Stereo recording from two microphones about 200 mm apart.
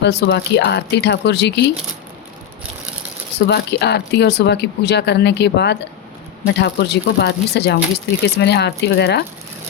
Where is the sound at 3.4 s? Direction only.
55° left (ahead or behind).